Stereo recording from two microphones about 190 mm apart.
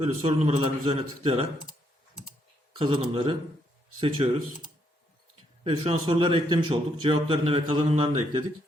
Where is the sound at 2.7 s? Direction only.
30° right (ahead or behind).